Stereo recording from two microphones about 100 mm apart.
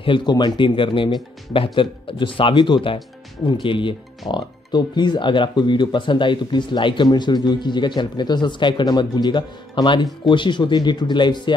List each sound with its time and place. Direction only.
0.0 s speech: 55° left (ahead or behind)